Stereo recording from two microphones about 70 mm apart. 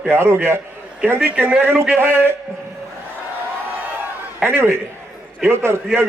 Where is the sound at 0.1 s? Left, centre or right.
Right.